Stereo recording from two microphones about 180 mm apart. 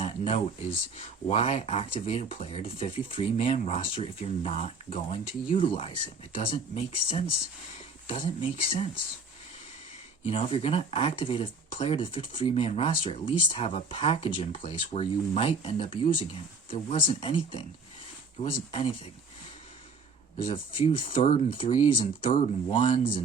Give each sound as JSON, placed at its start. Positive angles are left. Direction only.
{"t": 0.0, "sound": "speech", "side_deg": 35}
{"t": 10.2, "sound": "speech", "side_deg": 30}
{"t": 20.5, "sound": "speech", "side_deg": 30}